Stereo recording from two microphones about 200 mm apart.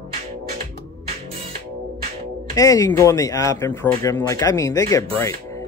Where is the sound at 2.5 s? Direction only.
15° left (ahead or behind).